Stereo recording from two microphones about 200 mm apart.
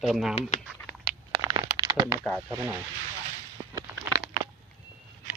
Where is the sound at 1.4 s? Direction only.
25° right (ahead or behind).